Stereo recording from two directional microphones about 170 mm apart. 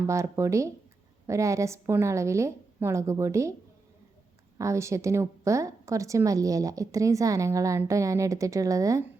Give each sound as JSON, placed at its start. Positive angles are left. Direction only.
{"t": 0.1, "sound": "a woman's voice", "side_deg": -15}
{"t": 4.5, "sound": "a woman's voice", "side_deg": -15}